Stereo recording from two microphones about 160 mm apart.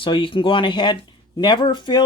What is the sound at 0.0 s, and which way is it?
Speech, 30° left (ahead or behind).